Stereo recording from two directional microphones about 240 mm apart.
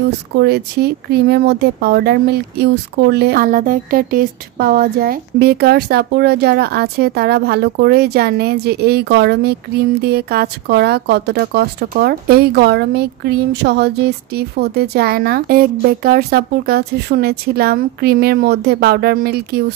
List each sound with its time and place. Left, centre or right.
0.4 s speech: right